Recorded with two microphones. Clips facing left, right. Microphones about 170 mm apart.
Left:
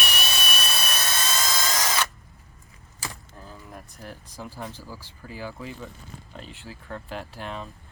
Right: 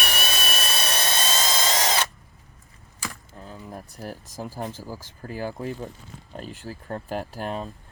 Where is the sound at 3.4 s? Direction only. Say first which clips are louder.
Right 5 dB; 25° right (ahead or behind).